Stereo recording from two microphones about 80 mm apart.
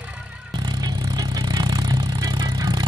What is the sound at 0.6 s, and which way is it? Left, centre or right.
Vehicle, right.